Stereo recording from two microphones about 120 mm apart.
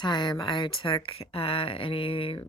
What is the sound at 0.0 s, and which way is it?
Speech, 35° left (ahead or behind).